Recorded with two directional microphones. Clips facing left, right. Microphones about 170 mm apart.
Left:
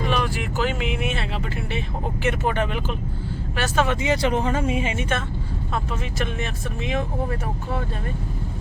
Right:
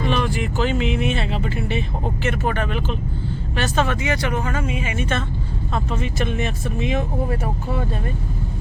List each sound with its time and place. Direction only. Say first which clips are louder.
0.0 s speech: right 2 dB; 5° left (ahead or behind)
2.2 s speech: left 1 dB; 15° left (ahead or behind)
3.8 s speech: left 1 dB; 25° left (ahead or behind)
5.7 s speech: right 3 dB; 5° left (ahead or behind)